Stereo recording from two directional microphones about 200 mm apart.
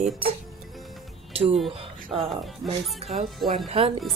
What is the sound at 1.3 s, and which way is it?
Speech, 30° right (ahead or behind).